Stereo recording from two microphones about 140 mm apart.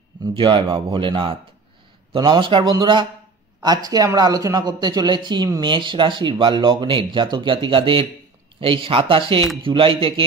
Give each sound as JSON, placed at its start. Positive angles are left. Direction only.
{"t": 0.2, "sound": "speech", "side_deg": -35}